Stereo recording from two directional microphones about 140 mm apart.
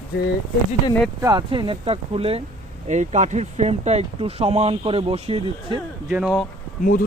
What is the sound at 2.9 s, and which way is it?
Speech, 60° right (ahead or behind).